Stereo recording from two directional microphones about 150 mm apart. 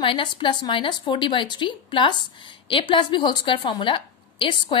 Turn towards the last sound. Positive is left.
turn(degrees=35)  # may be behind; listen again after turning